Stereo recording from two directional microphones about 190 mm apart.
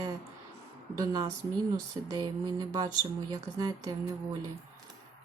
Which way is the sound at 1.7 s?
20° right (ahead or behind).